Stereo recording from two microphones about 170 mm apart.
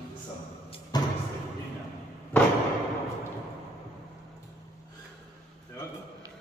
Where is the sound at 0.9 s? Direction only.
25° left (ahead or behind).